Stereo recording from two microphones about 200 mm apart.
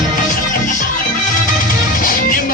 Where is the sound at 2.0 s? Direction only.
45° left (ahead or behind).